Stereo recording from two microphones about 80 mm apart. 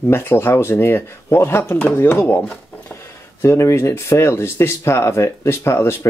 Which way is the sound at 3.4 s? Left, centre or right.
Left.